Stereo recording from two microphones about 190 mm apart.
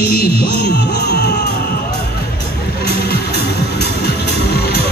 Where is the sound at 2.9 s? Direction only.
55° left (ahead or behind).